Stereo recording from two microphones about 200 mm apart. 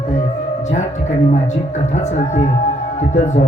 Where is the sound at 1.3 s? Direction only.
35° left (ahead or behind).